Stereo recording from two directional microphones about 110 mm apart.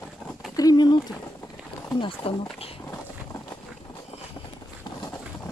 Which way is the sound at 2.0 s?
55° left (ahead or behind).